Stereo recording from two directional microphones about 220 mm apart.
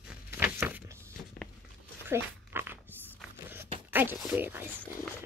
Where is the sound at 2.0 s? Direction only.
10° right (ahead or behind).